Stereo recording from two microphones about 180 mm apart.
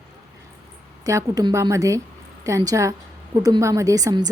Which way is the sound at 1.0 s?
20° right (ahead or behind).